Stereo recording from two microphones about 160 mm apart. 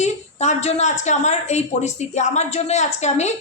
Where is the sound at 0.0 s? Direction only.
45° left (ahead or behind).